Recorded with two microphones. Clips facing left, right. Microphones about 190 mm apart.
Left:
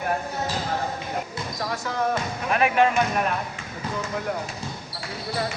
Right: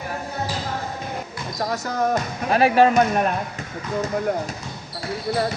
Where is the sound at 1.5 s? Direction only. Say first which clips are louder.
Right 4 dB; 40° right (ahead or behind).